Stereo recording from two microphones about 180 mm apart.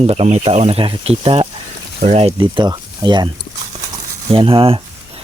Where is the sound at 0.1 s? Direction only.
35° right (ahead or behind).